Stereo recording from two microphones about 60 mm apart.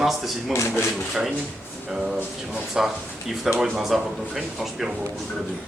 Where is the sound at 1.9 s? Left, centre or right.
Centre.